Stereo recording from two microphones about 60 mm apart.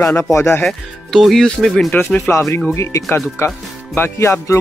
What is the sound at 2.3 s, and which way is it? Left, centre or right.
Speech, left.